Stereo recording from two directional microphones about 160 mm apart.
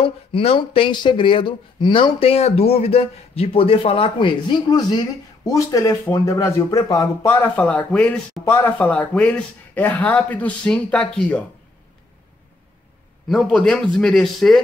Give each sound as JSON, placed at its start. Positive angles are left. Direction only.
{"t": 0.0, "sound": "speech", "side_deg": 35}
{"t": 7.5, "sound": "speech", "side_deg": 10}
{"t": 13.3, "sound": "a man's voice", "side_deg": 5}